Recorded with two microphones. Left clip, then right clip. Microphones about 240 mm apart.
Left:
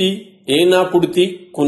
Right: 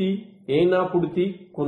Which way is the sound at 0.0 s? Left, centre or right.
Left.